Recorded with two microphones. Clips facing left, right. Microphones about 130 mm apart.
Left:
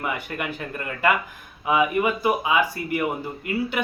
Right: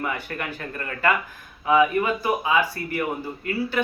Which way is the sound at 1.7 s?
10° left (ahead or behind).